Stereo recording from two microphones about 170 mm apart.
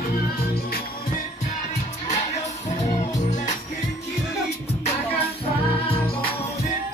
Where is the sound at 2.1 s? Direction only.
40° left (ahead or behind).